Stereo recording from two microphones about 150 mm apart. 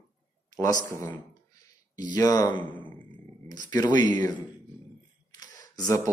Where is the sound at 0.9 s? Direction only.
15° left (ahead or behind).